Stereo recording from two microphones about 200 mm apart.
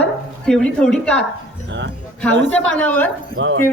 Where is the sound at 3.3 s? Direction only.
65° right (ahead or behind).